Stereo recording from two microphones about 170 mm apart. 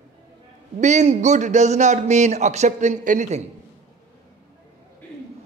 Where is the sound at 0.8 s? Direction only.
45° right (ahead or behind).